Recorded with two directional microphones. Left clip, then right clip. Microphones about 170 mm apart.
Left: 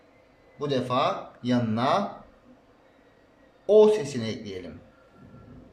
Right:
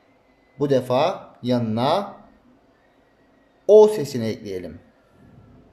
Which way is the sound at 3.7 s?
35° right (ahead or behind).